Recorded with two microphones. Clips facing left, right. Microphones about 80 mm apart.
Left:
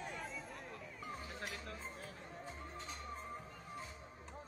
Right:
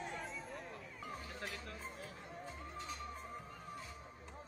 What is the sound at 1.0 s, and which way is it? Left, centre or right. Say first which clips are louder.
Chatter: even; left.